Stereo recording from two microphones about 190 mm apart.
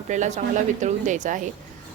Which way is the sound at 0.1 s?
40° right (ahead or behind).